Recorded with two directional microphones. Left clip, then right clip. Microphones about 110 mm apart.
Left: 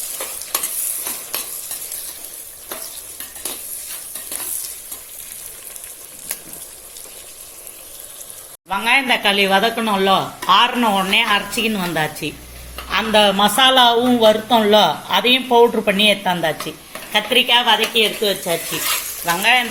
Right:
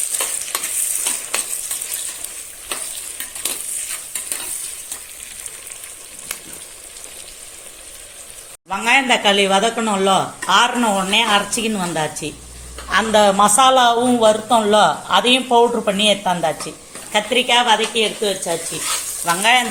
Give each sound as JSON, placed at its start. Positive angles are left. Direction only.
{"t": 8.7, "sound": "speech", "side_deg": -5}
{"t": 12.9, "sound": "a man's voice", "side_deg": -15}
{"t": 13.2, "sound": "speech", "side_deg": -5}
{"t": 19.2, "sound": "speech", "side_deg": 0}